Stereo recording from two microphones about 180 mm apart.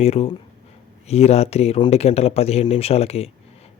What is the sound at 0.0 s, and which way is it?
Speech, 35° left (ahead or behind).